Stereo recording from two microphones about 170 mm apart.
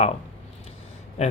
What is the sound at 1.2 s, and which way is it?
Speech, 40° left (ahead or behind).